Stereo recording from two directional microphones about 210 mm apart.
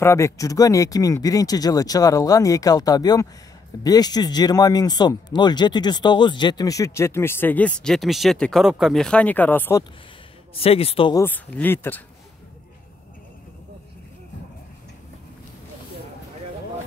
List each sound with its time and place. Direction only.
0.0 s speech: 15° left (ahead or behind)
10.5 s speech: 25° left (ahead or behind)
11.2 s speech: 10° left (ahead or behind)